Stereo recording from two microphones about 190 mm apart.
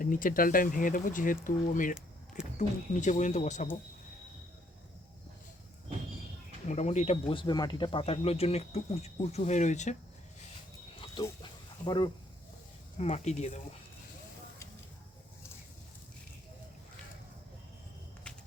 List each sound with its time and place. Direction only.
0.0 s speech: 45° left (ahead or behind)
6.7 s speech: 35° left (ahead or behind)
11.0 s a sound: 25° left (ahead or behind)
11.9 s speech: 25° left (ahead or behind)
13.0 s speech: 35° left (ahead or behind)